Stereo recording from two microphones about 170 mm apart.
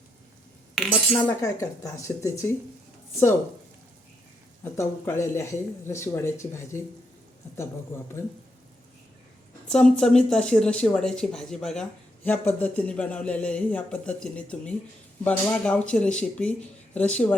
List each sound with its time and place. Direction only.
0.8 s cutlery: centre (ahead or behind)
1.3 s speech: 15° left (ahead or behind)
4.6 s speech: 15° left (ahead or behind)
9.6 s speech: 5° left (ahead or behind)